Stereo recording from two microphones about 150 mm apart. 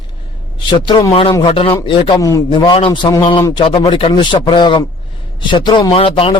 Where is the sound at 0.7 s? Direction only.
30° left (ahead or behind).